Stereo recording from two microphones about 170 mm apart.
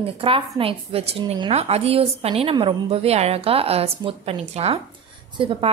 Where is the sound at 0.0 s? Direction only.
35° right (ahead or behind).